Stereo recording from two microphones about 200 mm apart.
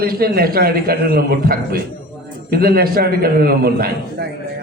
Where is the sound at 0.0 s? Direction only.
50° right (ahead or behind).